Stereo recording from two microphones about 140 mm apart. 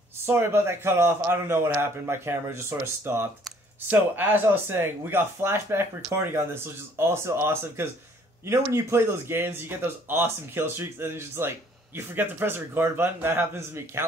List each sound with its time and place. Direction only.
0.3 s speech: 15° right (ahead or behind)